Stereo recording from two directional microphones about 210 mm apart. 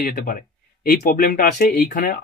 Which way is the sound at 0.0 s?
40° left (ahead or behind).